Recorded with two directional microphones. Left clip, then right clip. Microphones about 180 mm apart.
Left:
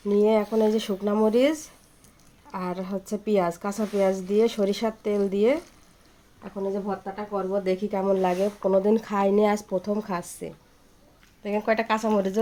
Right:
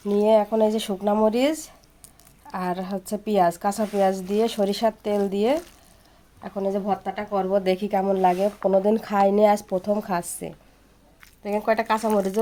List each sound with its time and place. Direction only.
0.0 s a woman's voice: 20° right (ahead or behind)
6.8 s speech: 50° right (ahead or behind)
7.6 s speech: 35° right (ahead or behind)
7.9 s a woman's voice: 20° right (ahead or behind)